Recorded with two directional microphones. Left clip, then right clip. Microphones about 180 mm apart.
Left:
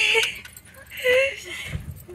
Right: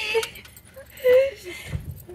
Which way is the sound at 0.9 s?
30° right (ahead or behind).